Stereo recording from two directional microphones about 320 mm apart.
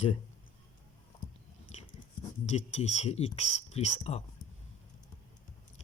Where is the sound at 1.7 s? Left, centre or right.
Left.